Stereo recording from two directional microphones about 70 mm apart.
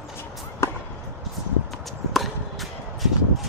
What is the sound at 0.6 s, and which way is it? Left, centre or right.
Music, left.